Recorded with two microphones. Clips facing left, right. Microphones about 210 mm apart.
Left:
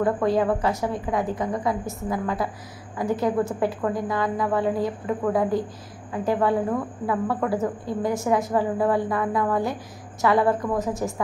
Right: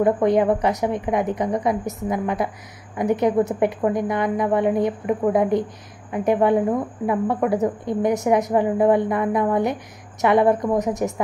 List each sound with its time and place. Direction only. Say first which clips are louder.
0.0 s a woman's voice: right 4 dB; 20° right (ahead or behind)